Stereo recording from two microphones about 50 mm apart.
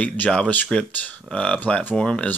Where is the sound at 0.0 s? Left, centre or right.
Left.